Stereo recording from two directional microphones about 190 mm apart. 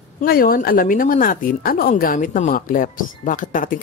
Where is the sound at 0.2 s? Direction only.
50° left (ahead or behind).